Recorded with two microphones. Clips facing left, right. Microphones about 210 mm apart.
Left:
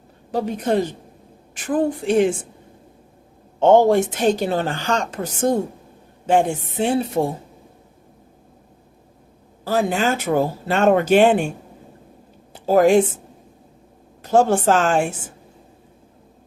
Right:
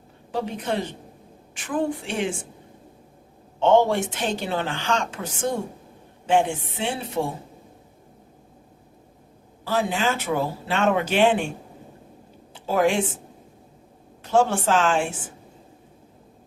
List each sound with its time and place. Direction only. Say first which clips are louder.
0.3 s a woman's voice: left 6 dB; 40° left (ahead or behind)
3.6 s a woman's voice: left 5 dB; 40° left (ahead or behind)
9.6 s speech: left 4 dB; 45° left (ahead or behind)
12.5 s speech: left 7 dB; 40° left (ahead or behind)
14.3 s a woman's voice: left 4 dB; 40° left (ahead or behind)